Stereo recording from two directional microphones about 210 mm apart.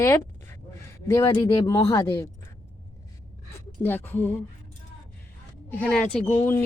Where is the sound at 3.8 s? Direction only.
10° left (ahead or behind).